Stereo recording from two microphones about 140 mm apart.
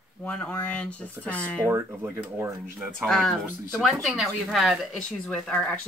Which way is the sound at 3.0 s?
5° left (ahead or behind).